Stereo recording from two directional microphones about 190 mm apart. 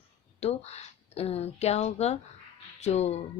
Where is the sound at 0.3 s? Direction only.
35° left (ahead or behind).